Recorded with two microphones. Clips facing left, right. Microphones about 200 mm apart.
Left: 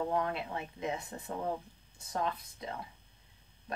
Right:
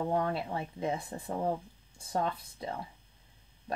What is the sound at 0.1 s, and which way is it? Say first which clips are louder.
Speech: right 2 dB; 30° right (ahead or behind).